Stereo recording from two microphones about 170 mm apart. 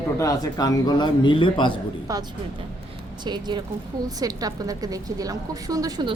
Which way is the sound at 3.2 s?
25° right (ahead or behind).